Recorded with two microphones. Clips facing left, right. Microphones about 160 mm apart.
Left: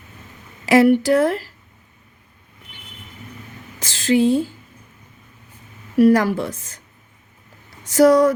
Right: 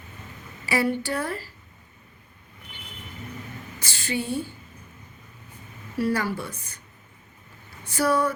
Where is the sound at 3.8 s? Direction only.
90° left.